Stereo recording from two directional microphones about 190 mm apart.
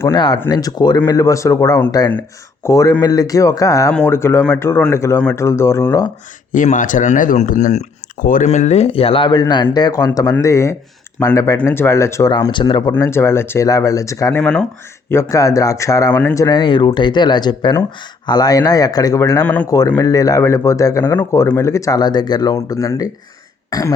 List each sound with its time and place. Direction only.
0.1 s speech: 25° left (ahead or behind)
6.5 s speech: 40° left (ahead or behind); by 12.9 s 25° left (ahead or behind)
12.9 s speech: 15° left (ahead or behind)